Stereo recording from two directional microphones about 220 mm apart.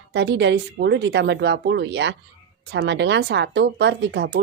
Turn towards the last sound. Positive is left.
turn(degrees=-50)  # may be behind; listen again after turning